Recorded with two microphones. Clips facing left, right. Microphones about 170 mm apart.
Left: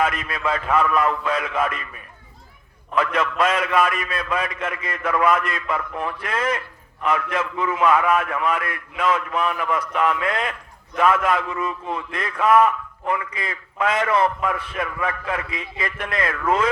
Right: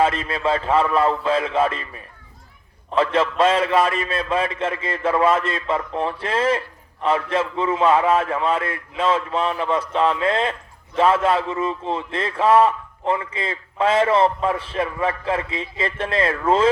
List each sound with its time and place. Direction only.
0.0 s a man's voice: 30° right (ahead or behind)